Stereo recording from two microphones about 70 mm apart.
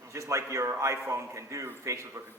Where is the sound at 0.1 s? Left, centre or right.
Right.